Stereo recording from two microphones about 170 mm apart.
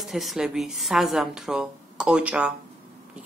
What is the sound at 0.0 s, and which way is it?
A man's voice, centre (ahead or behind).